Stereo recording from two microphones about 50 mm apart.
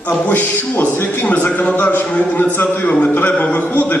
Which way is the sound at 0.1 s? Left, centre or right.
Left.